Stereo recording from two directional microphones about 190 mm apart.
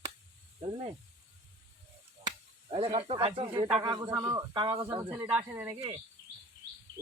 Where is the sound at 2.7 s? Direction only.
30° right (ahead or behind).